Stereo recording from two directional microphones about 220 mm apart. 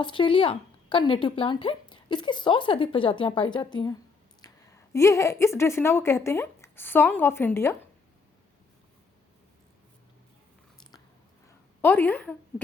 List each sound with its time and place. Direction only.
0.0 s speech: 20° left (ahead or behind)
11.8 s speech: 10° left (ahead or behind)